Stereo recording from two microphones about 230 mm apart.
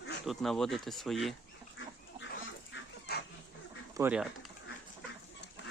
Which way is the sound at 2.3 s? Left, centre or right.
Left.